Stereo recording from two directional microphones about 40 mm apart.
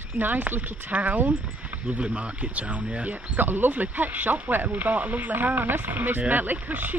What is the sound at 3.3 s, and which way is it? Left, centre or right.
Speech, right.